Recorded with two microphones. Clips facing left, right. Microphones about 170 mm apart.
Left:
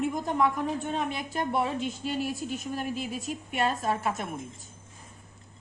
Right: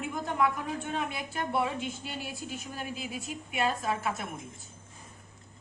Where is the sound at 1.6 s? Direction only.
40° left (ahead or behind).